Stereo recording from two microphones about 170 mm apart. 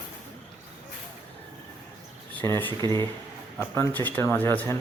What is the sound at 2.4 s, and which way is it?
Speech, 15° left (ahead or behind).